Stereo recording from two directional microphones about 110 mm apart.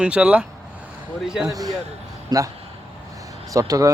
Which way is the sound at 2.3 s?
35° right (ahead or behind).